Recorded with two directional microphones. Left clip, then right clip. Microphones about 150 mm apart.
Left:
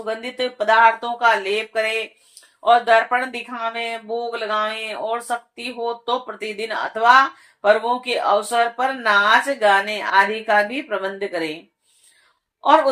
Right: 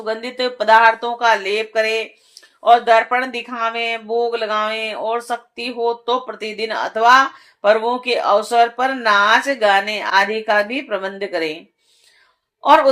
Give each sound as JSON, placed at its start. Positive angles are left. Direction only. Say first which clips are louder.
{"t": 0.0, "sound": "speech", "louder": "right 3 dB", "side_deg": -35}
{"t": 12.6, "sound": "speech", "louder": "right 3 dB", "side_deg": -35}